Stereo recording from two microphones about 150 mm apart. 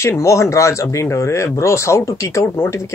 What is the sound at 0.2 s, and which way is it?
Speech, 20° left (ahead or behind).